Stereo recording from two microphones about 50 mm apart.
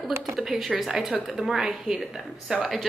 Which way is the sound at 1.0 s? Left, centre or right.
Centre.